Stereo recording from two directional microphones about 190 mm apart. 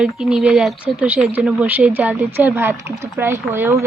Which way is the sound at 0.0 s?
Centre (ahead or behind).